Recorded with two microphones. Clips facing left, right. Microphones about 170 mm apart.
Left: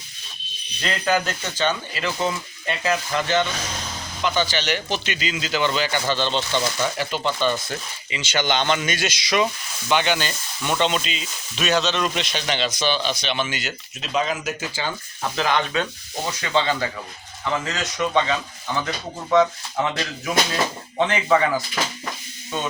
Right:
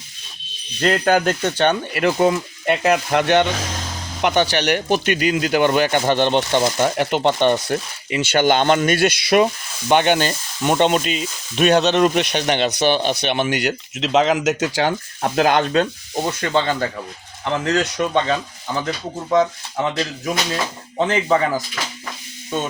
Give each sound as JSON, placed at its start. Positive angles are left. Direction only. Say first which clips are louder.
{"t": 0.8, "sound": "speech", "louder": "right 6 dB", "side_deg": -50}
{"t": 15.2, "sound": "speech", "louder": "right 6 dB", "side_deg": -50}
{"t": 17.9, "sound": "speech", "louder": "right 2 dB", "side_deg": -40}
{"t": 21.0, "sound": "speech", "louder": "right 2 dB", "side_deg": -35}